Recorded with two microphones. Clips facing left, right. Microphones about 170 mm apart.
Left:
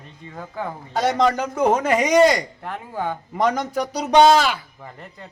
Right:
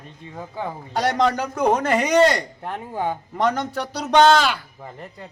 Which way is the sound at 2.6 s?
15° right (ahead or behind).